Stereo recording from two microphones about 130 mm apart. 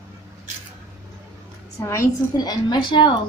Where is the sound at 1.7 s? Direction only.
25° left (ahead or behind).